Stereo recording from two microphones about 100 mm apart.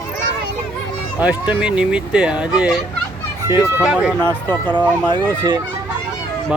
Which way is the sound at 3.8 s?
10° right (ahead or behind).